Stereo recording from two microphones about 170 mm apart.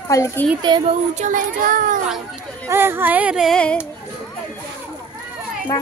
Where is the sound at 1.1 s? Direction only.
50° right (ahead or behind).